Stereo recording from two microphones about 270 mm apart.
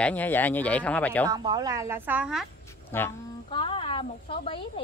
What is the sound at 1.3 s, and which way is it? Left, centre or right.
A woman's voice, centre.